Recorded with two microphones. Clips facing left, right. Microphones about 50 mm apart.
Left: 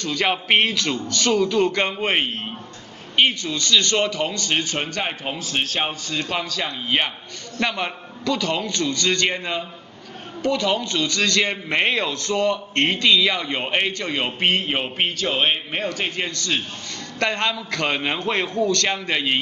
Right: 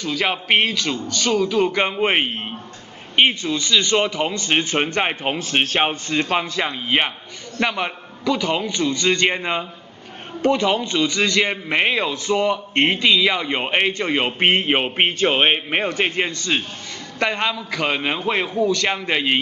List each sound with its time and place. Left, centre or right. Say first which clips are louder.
0.0 s a man's voice: even; centre; by 16.6 s right
17.2 s a man's voice: right 1 dB; centre